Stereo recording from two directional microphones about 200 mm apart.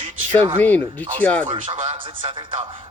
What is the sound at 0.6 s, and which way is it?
Speech, 10° left (ahead or behind).